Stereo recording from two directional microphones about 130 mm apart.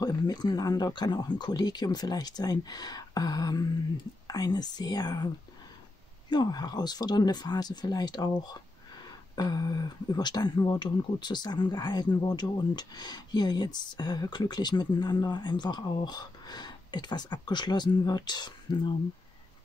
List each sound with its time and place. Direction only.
0.0 s speech: 30° left (ahead or behind)
9.3 s speech: 30° left (ahead or behind)